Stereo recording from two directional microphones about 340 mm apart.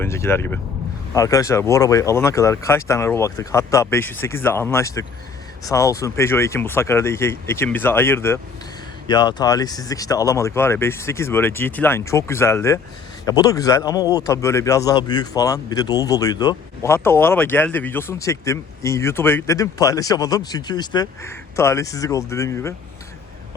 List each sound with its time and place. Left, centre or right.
0.0 s speech: centre